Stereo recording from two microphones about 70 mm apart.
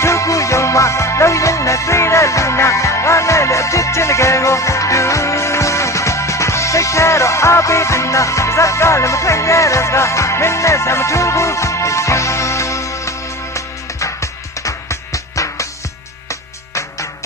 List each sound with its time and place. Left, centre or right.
0.0 s music: left